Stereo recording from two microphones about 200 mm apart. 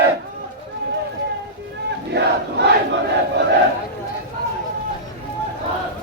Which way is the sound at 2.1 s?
55° right (ahead or behind).